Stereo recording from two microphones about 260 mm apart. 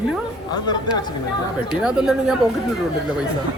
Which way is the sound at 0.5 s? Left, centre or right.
Centre.